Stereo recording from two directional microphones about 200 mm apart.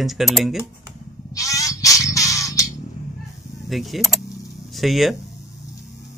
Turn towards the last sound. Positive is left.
turn(degrees=0)  # may be behind; listen again after turning